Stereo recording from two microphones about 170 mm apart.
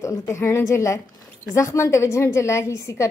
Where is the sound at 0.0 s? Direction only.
20° left (ahead or behind).